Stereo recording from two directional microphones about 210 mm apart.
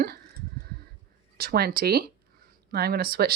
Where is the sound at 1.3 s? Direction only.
45° right (ahead or behind).